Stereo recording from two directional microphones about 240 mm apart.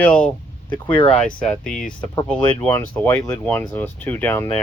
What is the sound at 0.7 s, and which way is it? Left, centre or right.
Speech, left.